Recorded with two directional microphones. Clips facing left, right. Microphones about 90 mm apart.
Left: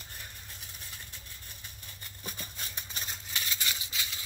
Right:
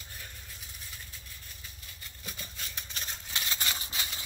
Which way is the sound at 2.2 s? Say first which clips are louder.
Left 1 dB; 25° left (ahead or behind).